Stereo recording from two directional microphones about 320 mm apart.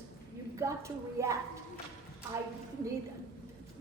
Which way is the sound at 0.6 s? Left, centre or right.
Centre.